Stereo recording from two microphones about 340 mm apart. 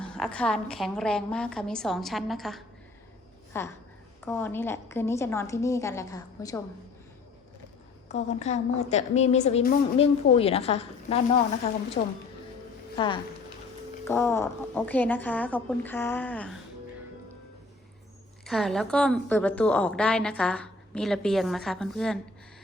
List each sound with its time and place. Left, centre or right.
0.0 s a woman's voice: centre
8.1 s a woman's voice: centre
18.4 s a woman's voice: centre